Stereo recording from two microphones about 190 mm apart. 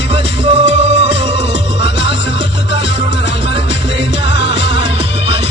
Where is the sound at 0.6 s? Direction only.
35° right (ahead or behind).